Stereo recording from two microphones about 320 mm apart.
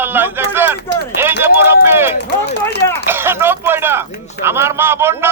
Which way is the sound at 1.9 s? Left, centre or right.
Centre.